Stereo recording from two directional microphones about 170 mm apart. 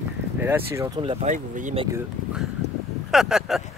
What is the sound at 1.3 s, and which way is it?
Speech, 45° right (ahead or behind).